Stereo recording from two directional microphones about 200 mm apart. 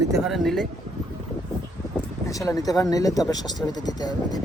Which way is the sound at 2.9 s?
15° left (ahead or behind).